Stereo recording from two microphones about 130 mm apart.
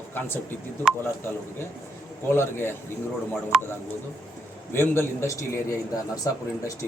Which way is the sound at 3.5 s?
5° right (ahead or behind).